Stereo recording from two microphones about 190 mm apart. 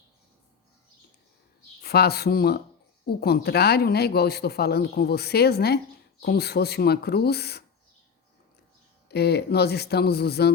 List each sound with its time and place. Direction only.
1.8 s speech: 55° left (ahead or behind)
9.0 s speech: 60° left (ahead or behind)